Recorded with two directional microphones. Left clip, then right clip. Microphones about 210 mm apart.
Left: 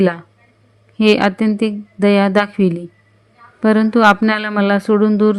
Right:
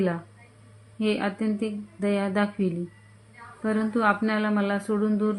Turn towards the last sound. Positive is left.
turn(degrees=45)  # may be behind; listen again after turning